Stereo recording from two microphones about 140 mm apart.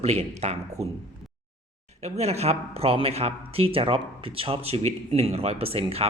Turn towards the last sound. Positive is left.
turn(degrees=-45)  # may be behind; listen again after turning